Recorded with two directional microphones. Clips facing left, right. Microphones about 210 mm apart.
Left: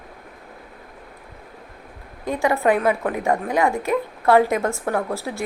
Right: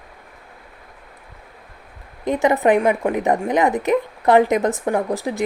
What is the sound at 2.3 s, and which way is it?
A woman's voice, 20° right (ahead or behind).